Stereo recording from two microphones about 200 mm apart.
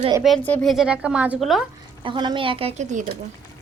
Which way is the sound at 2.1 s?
25° right (ahead or behind).